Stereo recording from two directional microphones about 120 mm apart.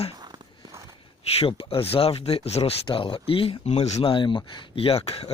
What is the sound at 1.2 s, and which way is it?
Speech, 55° left (ahead or behind).